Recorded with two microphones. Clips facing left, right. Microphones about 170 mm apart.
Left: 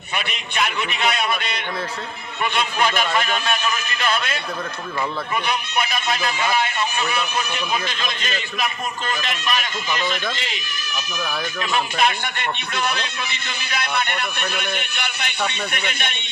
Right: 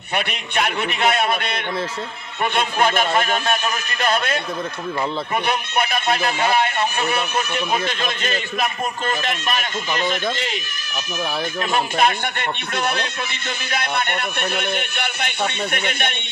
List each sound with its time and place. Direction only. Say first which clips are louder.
0.1 s a man's voice: right 4 dB; 55° right (ahead or behind)
11.6 s a man's voice: right 2 dB; 45° right (ahead or behind)